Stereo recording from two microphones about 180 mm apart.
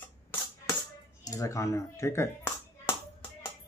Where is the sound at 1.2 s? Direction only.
20° left (ahead or behind).